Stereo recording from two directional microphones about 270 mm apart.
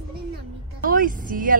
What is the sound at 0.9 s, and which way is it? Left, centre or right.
Speech, right.